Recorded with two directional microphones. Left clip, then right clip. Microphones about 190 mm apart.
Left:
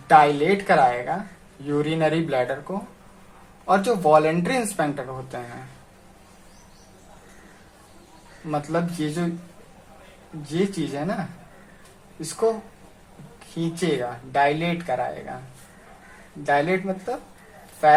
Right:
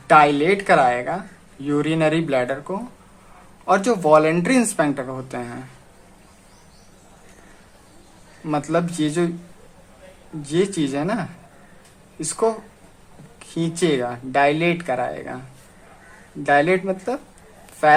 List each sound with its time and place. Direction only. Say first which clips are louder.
0.1 s speech: right 2 dB; 35° right (ahead or behind)
8.4 s speech: right 4 dB; 40° right (ahead or behind)
10.5 s speech: right 5 dB; 45° right (ahead or behind)
13.6 s speech: right 4 dB; 40° right (ahead or behind)
16.4 s speech: right 4 dB; 45° right (ahead or behind)